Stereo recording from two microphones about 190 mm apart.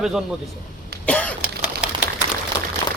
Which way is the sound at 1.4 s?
5° right (ahead or behind).